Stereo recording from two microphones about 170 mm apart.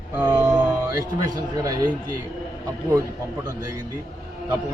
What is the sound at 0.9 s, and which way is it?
Speech, 20° right (ahead or behind).